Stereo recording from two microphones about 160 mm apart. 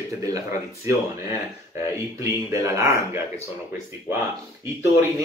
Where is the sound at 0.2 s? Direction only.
20° right (ahead or behind).